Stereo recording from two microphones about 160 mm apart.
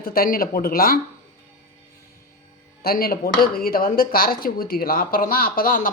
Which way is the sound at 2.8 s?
70° left (ahead or behind).